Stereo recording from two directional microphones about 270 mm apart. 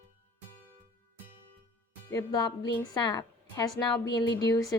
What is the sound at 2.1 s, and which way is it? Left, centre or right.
A woman's voice, centre.